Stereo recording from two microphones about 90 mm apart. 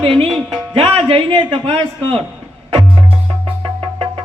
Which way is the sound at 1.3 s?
60° right (ahead or behind).